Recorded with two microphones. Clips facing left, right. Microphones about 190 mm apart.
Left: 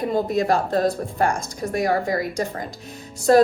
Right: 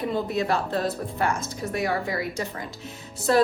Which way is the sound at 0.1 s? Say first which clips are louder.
Left 6 dB; 45° left (ahead or behind).